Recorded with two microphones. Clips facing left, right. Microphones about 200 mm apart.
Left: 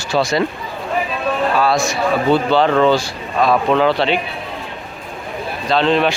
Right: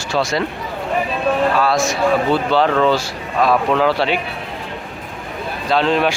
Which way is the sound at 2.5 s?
Centre (ahead or behind).